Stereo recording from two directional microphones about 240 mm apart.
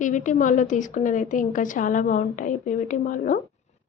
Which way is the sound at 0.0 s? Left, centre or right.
Left.